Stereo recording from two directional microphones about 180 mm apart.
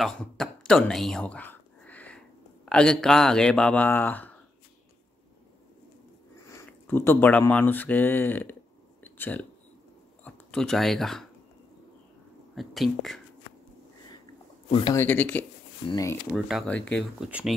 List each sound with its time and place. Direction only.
0.0 s speech: 5° left (ahead or behind)
6.4 s speech: 15° left (ahead or behind)
9.0 s a sound: 10° left (ahead or behind)
10.2 s speech: 5° left (ahead or behind)
12.5 s speech: centre (ahead or behind)
15.0 s speech: 10° left (ahead or behind)
16.3 s speech: centre (ahead or behind)
17.3 s speech: 5° right (ahead or behind)